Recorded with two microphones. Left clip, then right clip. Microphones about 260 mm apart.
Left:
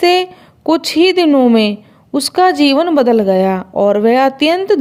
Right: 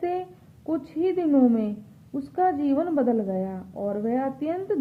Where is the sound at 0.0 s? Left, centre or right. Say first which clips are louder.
Left 17 dB; left.